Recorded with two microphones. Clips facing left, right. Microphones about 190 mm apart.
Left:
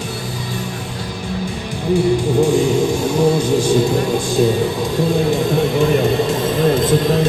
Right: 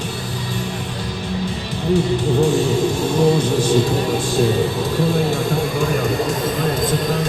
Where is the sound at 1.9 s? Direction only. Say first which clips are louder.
Left 3 dB; 10° left (ahead or behind).